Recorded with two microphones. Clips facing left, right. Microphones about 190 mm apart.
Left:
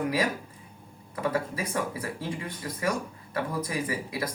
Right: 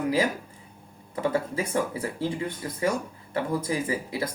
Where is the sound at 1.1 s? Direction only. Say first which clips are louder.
Right 3 dB; 30° right (ahead or behind).